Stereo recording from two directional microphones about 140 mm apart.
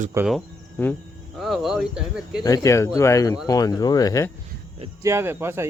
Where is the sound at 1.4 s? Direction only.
Centre (ahead or behind).